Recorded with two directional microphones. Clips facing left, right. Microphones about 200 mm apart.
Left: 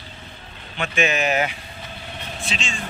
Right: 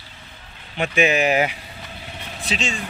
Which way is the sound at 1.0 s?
10° right (ahead or behind).